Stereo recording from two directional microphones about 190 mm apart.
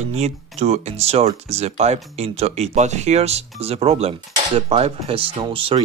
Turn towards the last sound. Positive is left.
turn(degrees=-25)  # may be behind; listen again after turning